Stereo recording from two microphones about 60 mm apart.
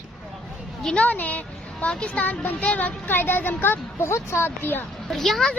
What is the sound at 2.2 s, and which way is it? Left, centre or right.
Speech, left.